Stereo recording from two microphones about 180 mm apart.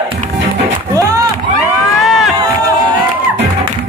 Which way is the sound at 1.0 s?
20° right (ahead or behind).